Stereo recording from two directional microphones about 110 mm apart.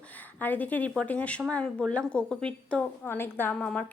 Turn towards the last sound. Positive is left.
turn(degrees=10)  # may be behind; listen again after turning